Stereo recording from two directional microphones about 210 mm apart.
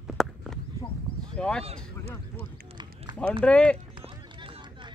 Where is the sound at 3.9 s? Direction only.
20° right (ahead or behind).